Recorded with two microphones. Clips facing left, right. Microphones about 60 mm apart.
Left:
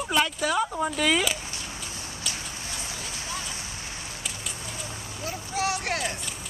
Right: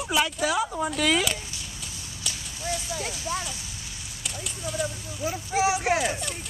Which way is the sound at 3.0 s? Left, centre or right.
Right.